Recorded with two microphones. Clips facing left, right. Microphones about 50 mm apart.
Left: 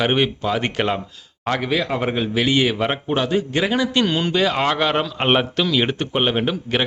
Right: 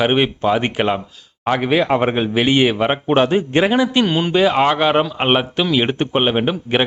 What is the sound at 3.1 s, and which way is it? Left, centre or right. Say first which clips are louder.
A man's voice: right 7 dB; right.